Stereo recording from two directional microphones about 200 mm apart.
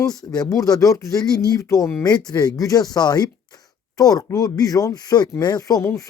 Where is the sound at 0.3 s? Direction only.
20° left (ahead or behind).